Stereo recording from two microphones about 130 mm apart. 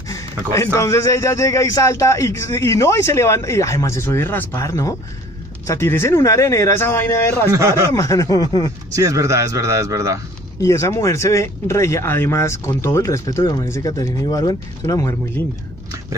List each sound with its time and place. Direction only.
0.1 s a sound: 25° left (ahead or behind)
0.7 s speech: 25° left (ahead or behind)
7.5 s speech: 25° right (ahead or behind)
7.9 s speech: 25° left (ahead or behind)
8.9 s speech: 25° right (ahead or behind)
10.6 s speech: 20° left (ahead or behind)